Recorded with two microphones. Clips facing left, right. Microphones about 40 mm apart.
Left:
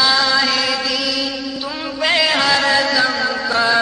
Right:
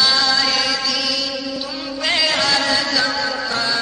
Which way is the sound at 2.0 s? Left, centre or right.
Centre.